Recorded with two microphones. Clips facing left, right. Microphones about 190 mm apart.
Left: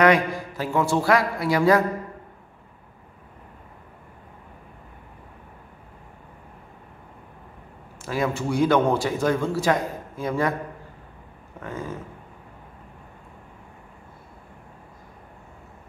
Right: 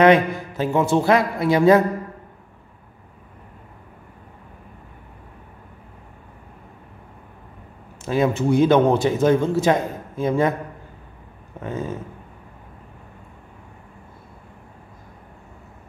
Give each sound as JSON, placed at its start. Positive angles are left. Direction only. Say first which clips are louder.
{"t": 0.0, "sound": "a man's voice", "louder": "right 4 dB", "side_deg": -25}
{"t": 8.0, "sound": "a man's voice", "louder": "right 6 dB", "side_deg": -20}
{"t": 11.6, "sound": "a man's voice", "louder": "right 5 dB", "side_deg": -20}